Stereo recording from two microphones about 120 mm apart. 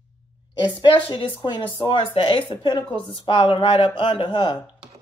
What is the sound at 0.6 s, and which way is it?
Speech, 40° left (ahead or behind).